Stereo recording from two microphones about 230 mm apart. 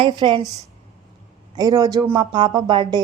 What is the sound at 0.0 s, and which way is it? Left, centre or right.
Speech, right.